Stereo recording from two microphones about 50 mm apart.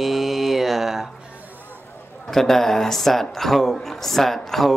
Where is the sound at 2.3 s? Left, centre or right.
Centre.